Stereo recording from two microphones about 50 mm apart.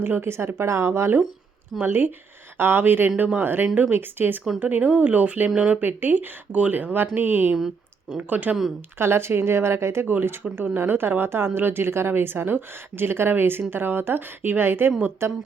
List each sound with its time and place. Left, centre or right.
0.0 s speech: right
1.8 s a woman's voice: right
5.8 s speech: right
9.0 s a woman's voice: right